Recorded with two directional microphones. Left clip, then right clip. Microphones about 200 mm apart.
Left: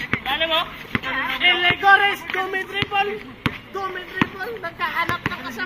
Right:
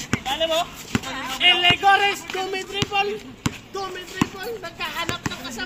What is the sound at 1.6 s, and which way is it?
Speech, 45° right (ahead or behind).